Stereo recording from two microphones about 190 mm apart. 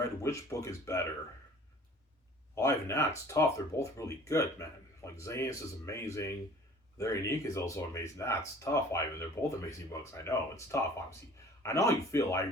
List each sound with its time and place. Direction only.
0.2 s speech: 15° left (ahead or behind)
2.6 s speech: 15° left (ahead or behind)